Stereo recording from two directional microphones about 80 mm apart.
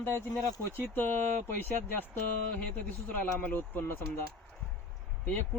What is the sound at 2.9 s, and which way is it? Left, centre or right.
Speech, left.